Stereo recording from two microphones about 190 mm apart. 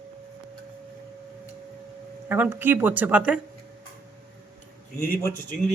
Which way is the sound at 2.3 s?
10° right (ahead or behind).